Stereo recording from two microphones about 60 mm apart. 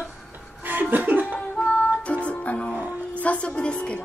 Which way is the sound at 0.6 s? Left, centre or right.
Right.